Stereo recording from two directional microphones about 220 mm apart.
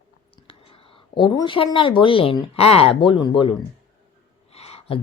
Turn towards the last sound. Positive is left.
turn(degrees=25)  # may be behind; listen again after turning